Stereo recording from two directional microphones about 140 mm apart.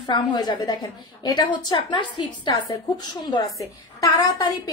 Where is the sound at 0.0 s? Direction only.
30° left (ahead or behind).